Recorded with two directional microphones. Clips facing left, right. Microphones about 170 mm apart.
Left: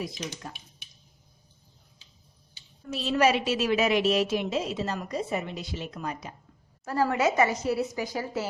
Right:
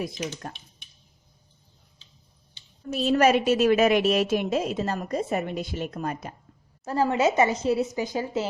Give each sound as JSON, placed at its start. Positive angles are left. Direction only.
{"t": 0.5, "sound": "a woman's voice", "side_deg": -50}
{"t": 2.9, "sound": "a woman's voice", "side_deg": -50}
{"t": 6.8, "sound": "a woman's voice", "side_deg": -25}